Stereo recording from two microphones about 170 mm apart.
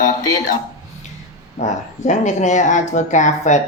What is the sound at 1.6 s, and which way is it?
A man's voice, 45° left (ahead or behind).